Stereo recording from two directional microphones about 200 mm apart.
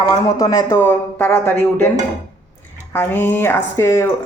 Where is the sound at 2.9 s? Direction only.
10° left (ahead or behind).